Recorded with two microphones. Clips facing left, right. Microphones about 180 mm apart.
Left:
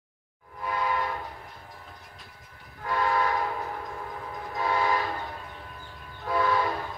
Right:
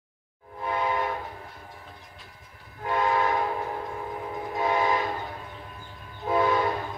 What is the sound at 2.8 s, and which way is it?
Train, 20° right (ahead or behind).